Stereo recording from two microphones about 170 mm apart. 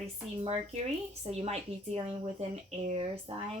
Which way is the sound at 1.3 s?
35° right (ahead or behind).